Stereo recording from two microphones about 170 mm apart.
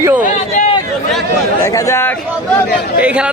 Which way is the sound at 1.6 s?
20° left (ahead or behind).